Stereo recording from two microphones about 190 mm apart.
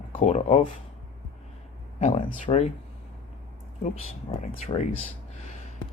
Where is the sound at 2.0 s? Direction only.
35° left (ahead or behind).